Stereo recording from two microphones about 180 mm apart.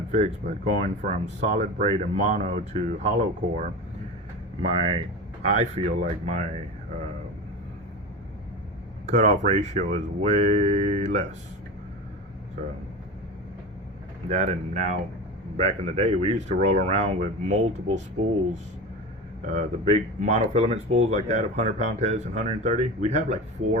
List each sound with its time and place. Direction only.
0.1 s speech: 40° right (ahead or behind)
9.0 s speech: 40° right (ahead or behind)
14.3 s speech: 35° right (ahead or behind)
19.5 s speech: 35° right (ahead or behind)